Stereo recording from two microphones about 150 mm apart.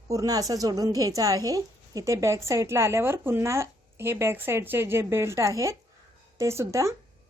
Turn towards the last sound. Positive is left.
turn(degrees=-20)  # may be behind; listen again after turning